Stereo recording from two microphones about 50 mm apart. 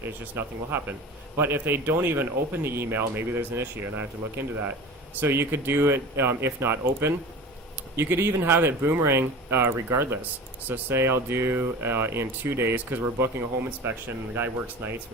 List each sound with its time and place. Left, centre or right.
0.0 s speech: right
10.6 s speech: right
10.9 s speech: right
12.7 s speech: right